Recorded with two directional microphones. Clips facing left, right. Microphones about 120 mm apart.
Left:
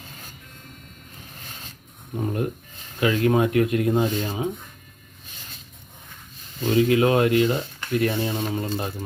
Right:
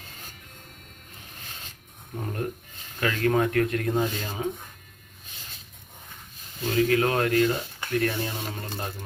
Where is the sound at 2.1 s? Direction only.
15° left (ahead or behind).